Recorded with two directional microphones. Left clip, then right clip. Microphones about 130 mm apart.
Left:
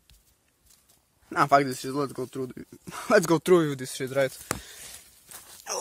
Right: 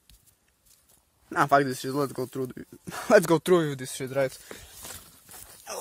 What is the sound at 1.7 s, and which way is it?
Speech, 15° right (ahead or behind).